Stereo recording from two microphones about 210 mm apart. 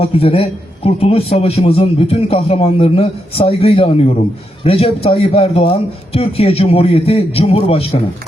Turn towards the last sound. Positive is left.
turn(degrees=30)  # may be behind; listen again after turning